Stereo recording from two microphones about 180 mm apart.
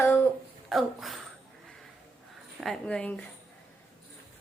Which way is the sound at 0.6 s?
Centre (ahead or behind).